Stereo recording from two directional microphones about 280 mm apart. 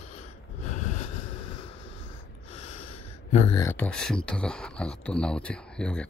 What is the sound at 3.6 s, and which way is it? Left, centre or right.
Speech, centre.